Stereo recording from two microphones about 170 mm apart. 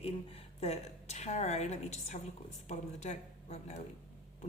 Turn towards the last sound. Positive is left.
turn(degrees=40)  # may be behind; listen again after turning